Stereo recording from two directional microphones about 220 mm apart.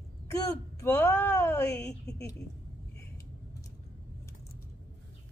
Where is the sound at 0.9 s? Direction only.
10° left (ahead or behind).